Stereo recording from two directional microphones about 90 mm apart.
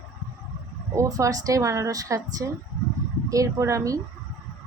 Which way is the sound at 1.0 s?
40° right (ahead or behind).